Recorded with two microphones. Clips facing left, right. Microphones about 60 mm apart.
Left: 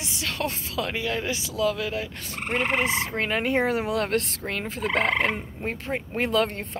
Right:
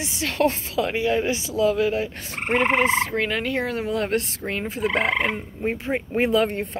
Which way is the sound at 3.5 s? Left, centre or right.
Left.